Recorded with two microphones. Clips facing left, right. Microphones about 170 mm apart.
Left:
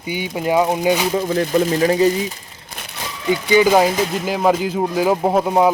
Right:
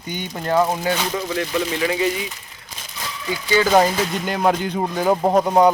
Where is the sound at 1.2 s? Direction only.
40° left (ahead or behind).